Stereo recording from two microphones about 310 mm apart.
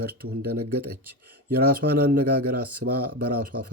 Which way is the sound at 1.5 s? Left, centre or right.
Right.